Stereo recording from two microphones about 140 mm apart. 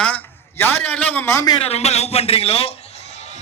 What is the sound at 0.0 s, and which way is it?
A man's voice, 10° left (ahead or behind).